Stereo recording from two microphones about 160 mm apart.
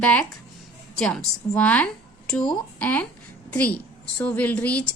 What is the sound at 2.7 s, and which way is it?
A woman's voice, 10° left (ahead or behind).